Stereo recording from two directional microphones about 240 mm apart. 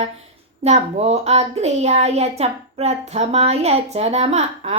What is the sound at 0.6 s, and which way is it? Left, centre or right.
A woman's voice, right.